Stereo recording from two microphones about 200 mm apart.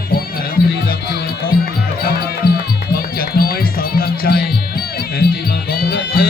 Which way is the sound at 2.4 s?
20° left (ahead or behind).